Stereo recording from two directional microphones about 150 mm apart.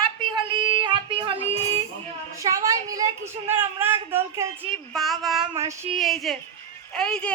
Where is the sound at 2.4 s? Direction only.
20° right (ahead or behind).